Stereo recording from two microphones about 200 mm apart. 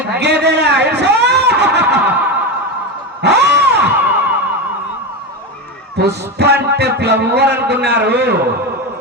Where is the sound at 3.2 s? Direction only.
55° right (ahead or behind).